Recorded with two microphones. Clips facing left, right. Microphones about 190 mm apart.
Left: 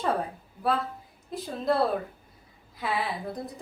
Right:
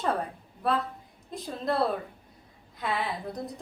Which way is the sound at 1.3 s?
Centre (ahead or behind).